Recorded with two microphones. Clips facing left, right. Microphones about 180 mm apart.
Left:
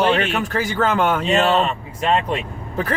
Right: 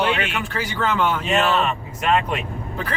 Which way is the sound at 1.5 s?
30° left (ahead or behind).